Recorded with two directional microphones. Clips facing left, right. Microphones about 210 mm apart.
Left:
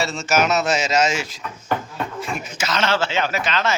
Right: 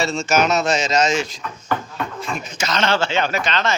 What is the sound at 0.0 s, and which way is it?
A man's voice, 5° left (ahead or behind).